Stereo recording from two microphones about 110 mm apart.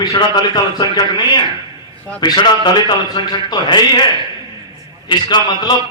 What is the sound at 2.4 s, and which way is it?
A man's voice, 45° left (ahead or behind).